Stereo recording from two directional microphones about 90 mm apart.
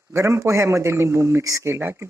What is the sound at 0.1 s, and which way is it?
A man's voice, 30° right (ahead or behind).